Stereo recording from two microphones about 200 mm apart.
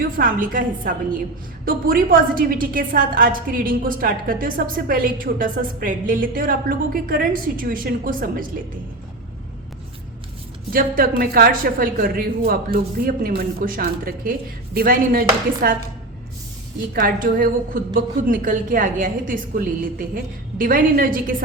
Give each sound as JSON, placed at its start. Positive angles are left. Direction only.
{"t": 0.0, "sound": "a woman's voice", "side_deg": -45}
{"t": 10.7, "sound": "a woman's voice", "side_deg": -45}
{"t": 16.9, "sound": "a woman's voice", "side_deg": -45}